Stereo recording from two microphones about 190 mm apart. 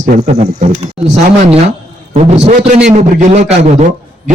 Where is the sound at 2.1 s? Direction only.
35° right (ahead or behind).